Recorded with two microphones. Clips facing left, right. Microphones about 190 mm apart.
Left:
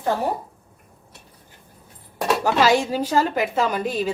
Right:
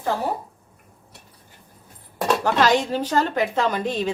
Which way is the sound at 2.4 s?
10° left (ahead or behind).